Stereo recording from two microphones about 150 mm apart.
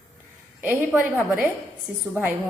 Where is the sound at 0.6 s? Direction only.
10° right (ahead or behind).